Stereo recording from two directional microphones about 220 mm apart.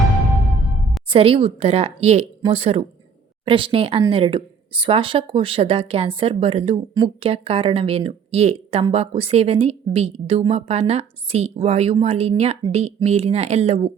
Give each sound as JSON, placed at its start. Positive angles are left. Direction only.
{"t": 1.1, "sound": "speech", "side_deg": -25}